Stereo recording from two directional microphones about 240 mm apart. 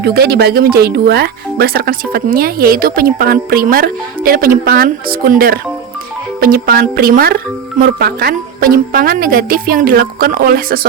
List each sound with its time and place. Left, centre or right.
0.0 s speech: right